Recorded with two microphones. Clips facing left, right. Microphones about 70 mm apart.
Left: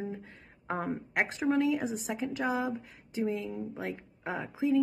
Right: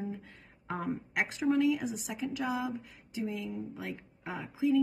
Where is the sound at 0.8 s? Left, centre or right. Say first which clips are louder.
Left 2 dB; left.